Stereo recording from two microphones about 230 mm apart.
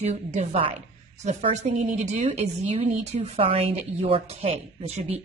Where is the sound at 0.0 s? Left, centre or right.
Right.